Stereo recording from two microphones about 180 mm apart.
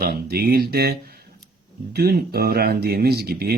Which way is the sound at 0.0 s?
60° right (ahead or behind).